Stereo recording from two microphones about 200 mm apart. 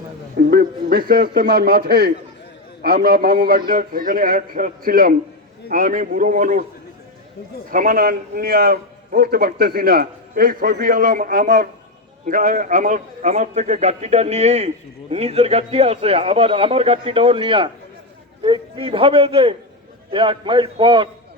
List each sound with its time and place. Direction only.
0.3 s a man's voice: 50° right (ahead or behind)
7.7 s a man's voice: 45° right (ahead or behind); by 21.1 s 25° right (ahead or behind)